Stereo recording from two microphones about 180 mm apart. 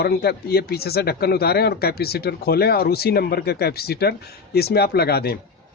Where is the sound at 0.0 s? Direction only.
60° left (ahead or behind).